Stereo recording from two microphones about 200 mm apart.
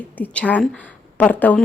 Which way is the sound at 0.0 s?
5° left (ahead or behind).